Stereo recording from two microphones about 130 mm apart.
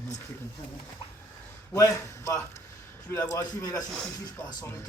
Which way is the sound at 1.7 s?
25° left (ahead or behind).